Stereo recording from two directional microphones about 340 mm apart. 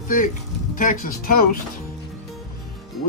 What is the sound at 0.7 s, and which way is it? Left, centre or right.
Speech, left.